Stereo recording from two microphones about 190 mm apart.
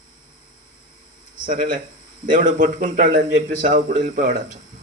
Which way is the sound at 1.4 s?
45° right (ahead or behind).